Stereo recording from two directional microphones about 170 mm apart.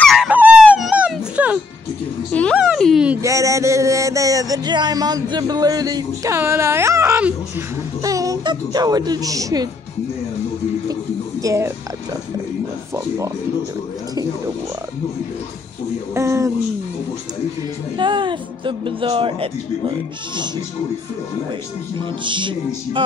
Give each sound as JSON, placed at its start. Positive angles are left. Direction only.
{"t": 0.0, "sound": "a sound", "side_deg": 0}
{"t": 0.3, "sound": "music", "side_deg": -10}
{"t": 2.5, "sound": "a sound", "side_deg": 0}
{"t": 3.2, "sound": "music", "side_deg": -20}
{"t": 8.0, "sound": "speech", "side_deg": -20}
{"t": 11.4, "sound": "speech", "side_deg": -15}
{"t": 16.2, "sound": "speech", "side_deg": -15}
{"t": 17.9, "sound": "speech", "side_deg": -30}
{"t": 22.2, "sound": "speech", "side_deg": -30}